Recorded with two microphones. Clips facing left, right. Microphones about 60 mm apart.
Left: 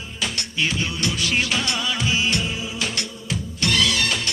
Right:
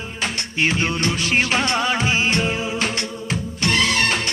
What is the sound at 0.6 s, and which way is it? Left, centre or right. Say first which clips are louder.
Music of bollywood: right 4 dB; right.